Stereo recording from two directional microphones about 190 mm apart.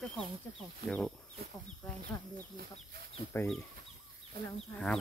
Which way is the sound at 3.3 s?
5° left (ahead or behind).